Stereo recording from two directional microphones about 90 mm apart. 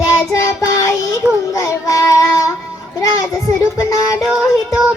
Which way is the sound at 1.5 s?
35° left (ahead or behind).